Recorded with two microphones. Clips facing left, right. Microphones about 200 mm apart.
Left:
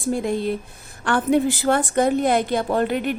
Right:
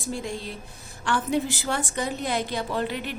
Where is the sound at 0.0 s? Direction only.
55° left (ahead or behind).